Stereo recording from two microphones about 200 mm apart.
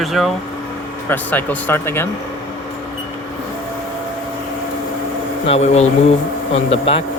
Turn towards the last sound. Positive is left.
turn(degrees=30)  # may be behind; listen again after turning